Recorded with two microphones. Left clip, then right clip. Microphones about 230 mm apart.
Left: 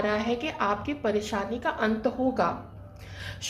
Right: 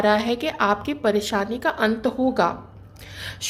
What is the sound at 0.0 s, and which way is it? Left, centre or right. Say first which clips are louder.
A woman's voice: right 7 dB; right.